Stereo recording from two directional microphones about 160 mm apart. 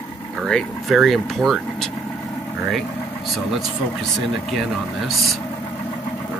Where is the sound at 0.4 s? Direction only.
Centre (ahead or behind).